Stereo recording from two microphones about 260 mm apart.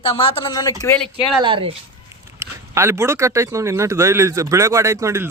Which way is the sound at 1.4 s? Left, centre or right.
Centre.